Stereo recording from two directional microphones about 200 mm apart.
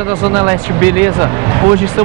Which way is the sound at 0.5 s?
10° right (ahead or behind).